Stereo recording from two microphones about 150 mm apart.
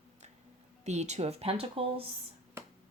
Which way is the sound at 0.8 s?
50° right (ahead or behind).